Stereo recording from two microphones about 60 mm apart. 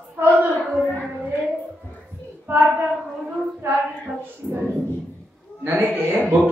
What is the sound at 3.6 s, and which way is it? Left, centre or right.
Speech, right.